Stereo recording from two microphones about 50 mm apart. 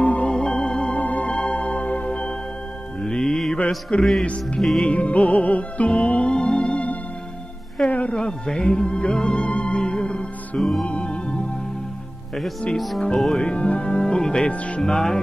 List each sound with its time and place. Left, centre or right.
0.0 s music: left
0.4 s music: centre
0.9 s music: left
3.0 s music: centre
3.5 s mantra: left
4.2 s music: left
4.6 s music: centre
4.9 s music: left
7.9 s speech: left
10.8 s music: left
12.7 s music: centre
13.4 s speech: left
14.5 s music: left
14.8 s speech: centre